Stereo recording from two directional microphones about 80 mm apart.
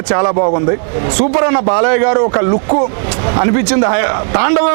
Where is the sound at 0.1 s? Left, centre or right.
Right.